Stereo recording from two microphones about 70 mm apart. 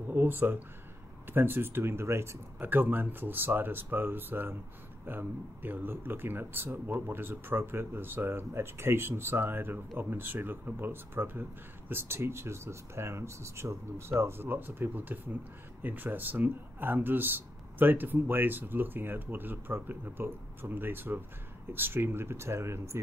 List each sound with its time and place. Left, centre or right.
0.1 s speech: right
2.7 s speech: right